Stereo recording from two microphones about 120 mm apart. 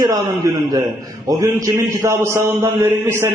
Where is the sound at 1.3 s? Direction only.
30° right (ahead or behind).